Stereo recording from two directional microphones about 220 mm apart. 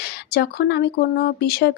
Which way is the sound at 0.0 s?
45° left (ahead or behind).